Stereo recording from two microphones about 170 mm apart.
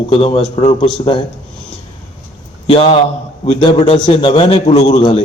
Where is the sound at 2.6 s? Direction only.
35° left (ahead or behind).